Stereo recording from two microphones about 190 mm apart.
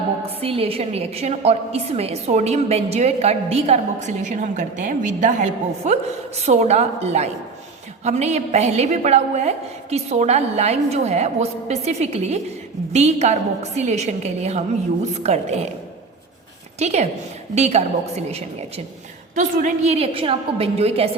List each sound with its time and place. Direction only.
0.4 s a woman's voice: 30° right (ahead or behind)
16.7 s a woman's voice: 35° right (ahead or behind)
19.4 s a woman's voice: 40° right (ahead or behind)